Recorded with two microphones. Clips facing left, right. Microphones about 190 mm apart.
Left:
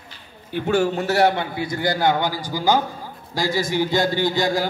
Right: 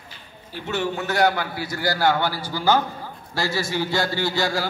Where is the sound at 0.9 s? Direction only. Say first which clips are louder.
Left 3 dB; 30° left (ahead or behind).